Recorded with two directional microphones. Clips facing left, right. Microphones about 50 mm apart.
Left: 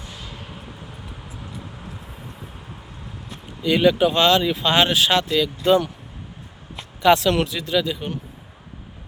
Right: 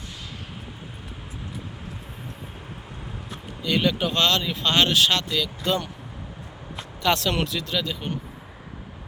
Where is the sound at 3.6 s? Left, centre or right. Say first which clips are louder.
Left 7 dB; centre.